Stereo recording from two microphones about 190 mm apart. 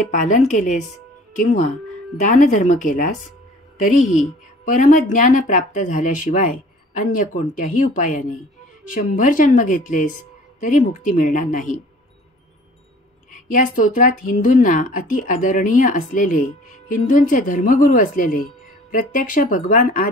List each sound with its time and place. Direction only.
0.1 s a woman's voice: 40° left (ahead or behind)
13.3 s a woman's voice: 45° left (ahead or behind)